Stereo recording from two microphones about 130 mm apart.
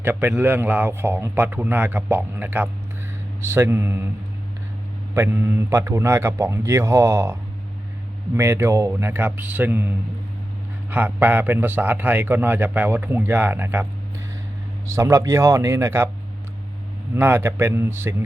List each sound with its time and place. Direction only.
0.0 s a man's voice: 15° right (ahead or behind)
5.1 s speech: 20° right (ahead or behind)
8.4 s a man's voice: 20° right (ahead or behind)
14.8 s speech: 25° right (ahead or behind)
17.2 s a man's voice: 15° right (ahead or behind)